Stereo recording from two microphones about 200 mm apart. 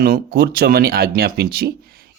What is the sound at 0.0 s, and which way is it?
Speech, 50° right (ahead or behind).